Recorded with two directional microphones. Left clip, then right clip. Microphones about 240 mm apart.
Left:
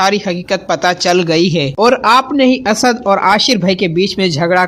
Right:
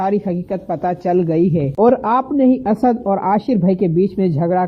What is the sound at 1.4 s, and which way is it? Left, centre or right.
Speech, left.